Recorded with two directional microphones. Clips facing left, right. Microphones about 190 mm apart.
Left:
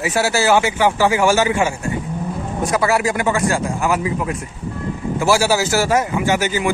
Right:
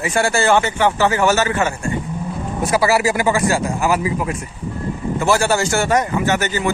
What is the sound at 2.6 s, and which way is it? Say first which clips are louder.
Speech: right 2 dB; 5° right (ahead or behind).